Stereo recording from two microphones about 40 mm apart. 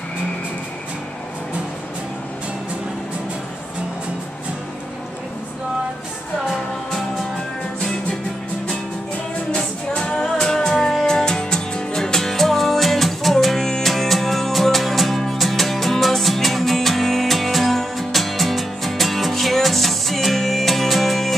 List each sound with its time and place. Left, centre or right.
9.5 s music: left; by 21.4 s centre